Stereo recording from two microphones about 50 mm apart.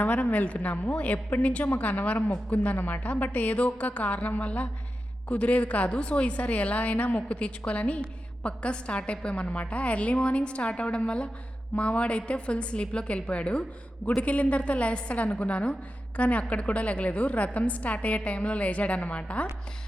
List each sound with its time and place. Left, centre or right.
0.0 s a woman's voice: left